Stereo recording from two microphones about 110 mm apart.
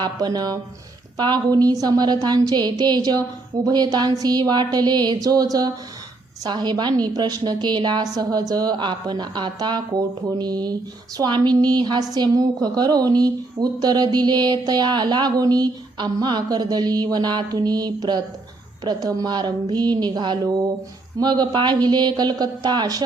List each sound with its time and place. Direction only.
0.0 s a woman's voice: 35° right (ahead or behind)